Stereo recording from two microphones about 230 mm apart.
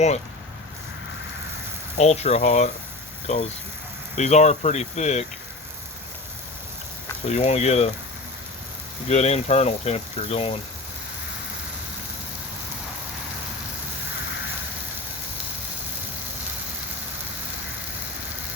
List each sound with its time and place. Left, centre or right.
2.0 s speech: left
7.3 s speech: left
9.0 s speech: left